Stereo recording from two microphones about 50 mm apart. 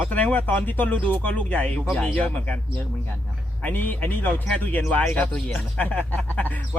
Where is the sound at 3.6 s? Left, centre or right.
Left.